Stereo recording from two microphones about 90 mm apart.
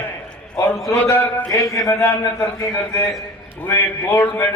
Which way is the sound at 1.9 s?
20° left (ahead or behind).